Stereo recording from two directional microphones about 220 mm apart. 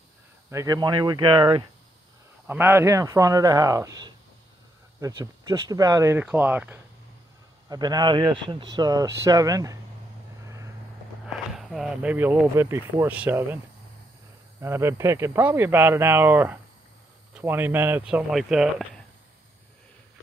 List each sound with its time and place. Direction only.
0.5 s speech: 15° right (ahead or behind)
2.4 s speech: 10° right (ahead or behind)
10.4 s vehicle: 15° right (ahead or behind)
11.5 s speech: centre (ahead or behind)
14.6 s speech: 10° right (ahead or behind)